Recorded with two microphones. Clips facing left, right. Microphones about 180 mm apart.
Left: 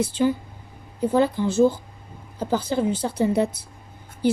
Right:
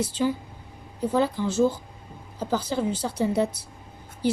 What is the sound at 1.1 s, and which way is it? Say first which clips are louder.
Speech: left 3 dB; 55° left (ahead or behind).